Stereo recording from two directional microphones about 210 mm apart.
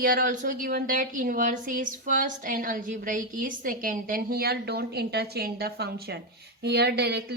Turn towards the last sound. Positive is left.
turn(degrees=-50)  # may be behind; listen again after turning